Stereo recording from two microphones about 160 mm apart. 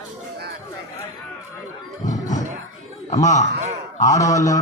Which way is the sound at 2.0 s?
50° left (ahead or behind).